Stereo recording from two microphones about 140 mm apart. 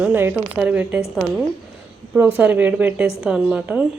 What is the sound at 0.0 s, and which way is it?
Speech, 15° right (ahead or behind).